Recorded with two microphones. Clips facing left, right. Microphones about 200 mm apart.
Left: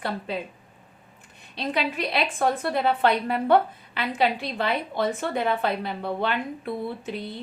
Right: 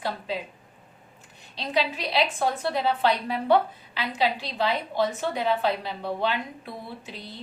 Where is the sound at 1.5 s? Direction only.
55° left (ahead or behind).